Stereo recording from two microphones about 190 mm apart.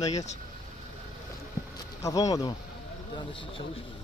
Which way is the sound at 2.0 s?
20° left (ahead or behind).